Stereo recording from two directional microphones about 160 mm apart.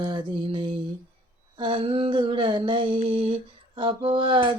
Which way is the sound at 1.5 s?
30° right (ahead or behind).